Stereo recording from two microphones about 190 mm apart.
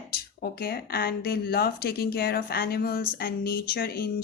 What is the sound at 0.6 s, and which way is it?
Speech, 55° left (ahead or behind).